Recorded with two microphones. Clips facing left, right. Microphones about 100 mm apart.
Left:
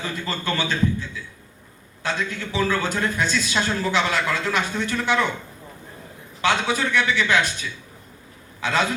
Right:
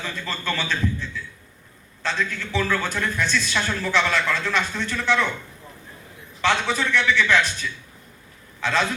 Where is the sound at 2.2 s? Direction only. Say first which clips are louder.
Even; 20° left (ahead or behind).